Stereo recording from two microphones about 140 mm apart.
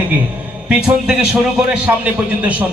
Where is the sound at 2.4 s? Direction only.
10° right (ahead or behind).